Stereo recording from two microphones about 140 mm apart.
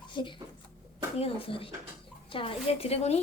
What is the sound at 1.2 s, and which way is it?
A woman's voice, 40° left (ahead or behind).